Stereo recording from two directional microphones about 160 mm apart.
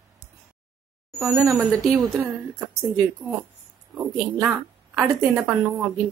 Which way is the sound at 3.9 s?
10° right (ahead or behind).